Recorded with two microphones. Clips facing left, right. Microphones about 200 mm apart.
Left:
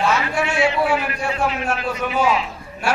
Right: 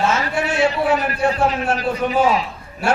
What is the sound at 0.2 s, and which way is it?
A man's voice, 40° right (ahead or behind).